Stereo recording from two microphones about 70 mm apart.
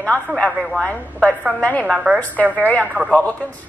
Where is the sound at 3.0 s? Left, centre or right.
Centre.